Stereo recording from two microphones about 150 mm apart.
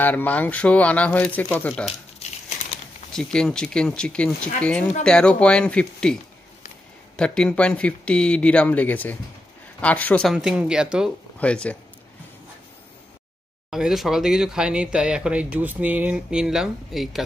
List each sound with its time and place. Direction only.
0.0 s speech: 10° left (ahead or behind)
1.7 s speech: centre (ahead or behind)
3.1 s speech: 5° left (ahead or behind)
7.2 s speech: 5° left (ahead or behind)
10.3 s speech: 5° right (ahead or behind)
11.3 s speech: 10° left (ahead or behind)
13.7 s speech: 5° right (ahead or behind)